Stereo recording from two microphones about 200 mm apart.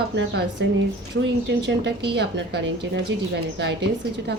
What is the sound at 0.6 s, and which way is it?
Speech, 65° right (ahead or behind).